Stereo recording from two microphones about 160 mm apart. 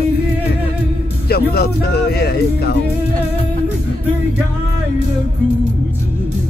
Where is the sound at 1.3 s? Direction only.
75° left (ahead or behind).